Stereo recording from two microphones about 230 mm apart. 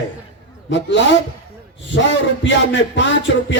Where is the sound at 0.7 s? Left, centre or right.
Left.